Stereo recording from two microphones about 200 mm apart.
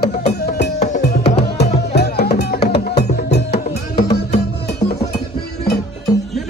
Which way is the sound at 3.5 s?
30° left (ahead or behind).